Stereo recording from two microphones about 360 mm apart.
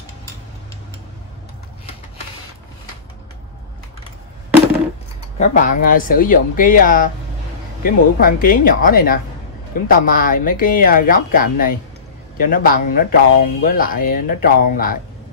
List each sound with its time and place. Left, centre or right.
5.4 s speech: left